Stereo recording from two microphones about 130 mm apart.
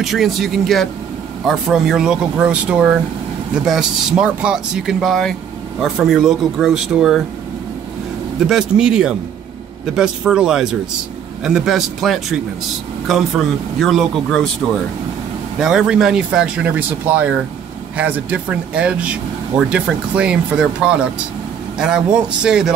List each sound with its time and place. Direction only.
0.0 s speech: centre (ahead or behind)
8.5 s speech: 5° right (ahead or behind)
15.6 s speech: 5° right (ahead or behind)